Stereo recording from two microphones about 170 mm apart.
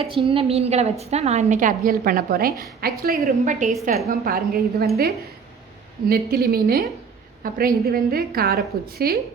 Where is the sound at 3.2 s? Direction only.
45° right (ahead or behind).